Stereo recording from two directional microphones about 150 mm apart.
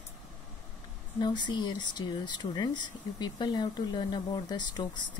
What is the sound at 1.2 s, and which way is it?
Speech, 30° left (ahead or behind).